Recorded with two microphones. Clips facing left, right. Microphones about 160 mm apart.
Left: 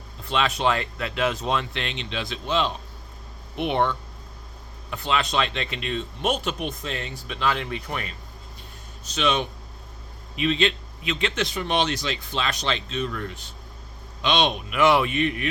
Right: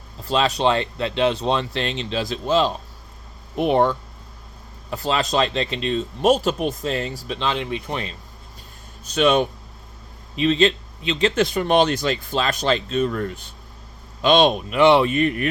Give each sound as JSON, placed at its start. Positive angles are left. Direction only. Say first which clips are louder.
{"t": 0.3, "sound": "speech", "louder": "right 4 dB", "side_deg": -35}
{"t": 7.3, "sound": "speech", "louder": "left 1 dB", "side_deg": -25}
{"t": 9.1, "sound": "speech", "louder": "right 7 dB", "side_deg": -50}
{"t": 10.3, "sound": "speech", "louder": "right 5 dB", "side_deg": -35}
{"t": 14.7, "sound": "speech", "louder": "right 3 dB", "side_deg": -30}
{"t": 15.1, "sound": "speech", "louder": "right 4 dB", "side_deg": -45}